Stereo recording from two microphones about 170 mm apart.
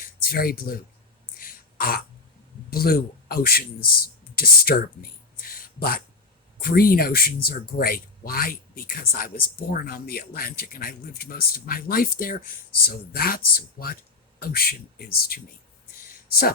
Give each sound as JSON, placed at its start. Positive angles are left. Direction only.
{"t": 0.0, "sound": "speech", "side_deg": 60}
{"t": 1.4, "sound": "throat clearing", "side_deg": 60}
{"t": 2.6, "sound": "speech", "side_deg": 60}
{"t": 5.4, "sound": "a sound", "side_deg": 60}
{"t": 6.6, "sound": "speech", "side_deg": 60}